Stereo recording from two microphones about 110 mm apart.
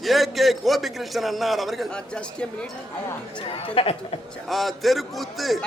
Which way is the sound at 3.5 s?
60° left (ahead or behind).